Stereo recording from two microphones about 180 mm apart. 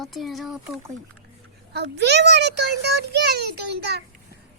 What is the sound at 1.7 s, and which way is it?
A child's voice, 70° right (ahead or behind).